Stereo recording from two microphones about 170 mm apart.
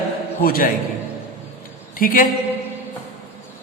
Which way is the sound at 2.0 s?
55° left (ahead or behind).